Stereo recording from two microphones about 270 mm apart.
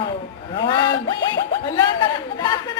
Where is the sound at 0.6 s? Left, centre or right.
Centre.